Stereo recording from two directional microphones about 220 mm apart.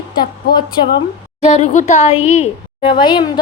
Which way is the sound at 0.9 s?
30° left (ahead or behind).